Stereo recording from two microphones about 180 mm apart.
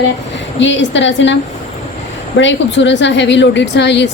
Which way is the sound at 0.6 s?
90° left.